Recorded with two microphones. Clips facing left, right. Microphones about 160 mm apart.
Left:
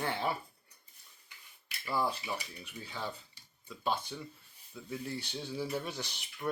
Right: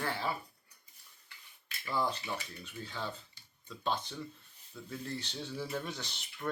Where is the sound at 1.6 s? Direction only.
10° left (ahead or behind).